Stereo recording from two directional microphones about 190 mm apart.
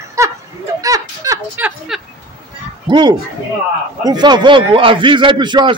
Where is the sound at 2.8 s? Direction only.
20° right (ahead or behind).